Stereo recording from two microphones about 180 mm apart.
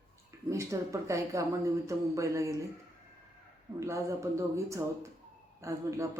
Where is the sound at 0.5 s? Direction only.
15° right (ahead or behind).